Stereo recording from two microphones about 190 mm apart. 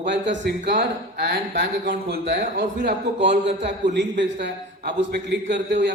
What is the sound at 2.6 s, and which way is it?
Speech, 45° right (ahead or behind).